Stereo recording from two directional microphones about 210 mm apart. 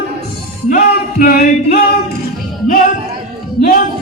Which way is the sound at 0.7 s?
45° left (ahead or behind).